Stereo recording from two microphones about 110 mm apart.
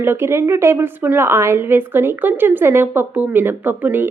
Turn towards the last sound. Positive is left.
turn(degrees=-20)  # may be behind; listen again after turning